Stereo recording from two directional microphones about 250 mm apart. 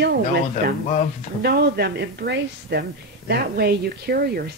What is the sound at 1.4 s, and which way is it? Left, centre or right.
A woman's voice, right.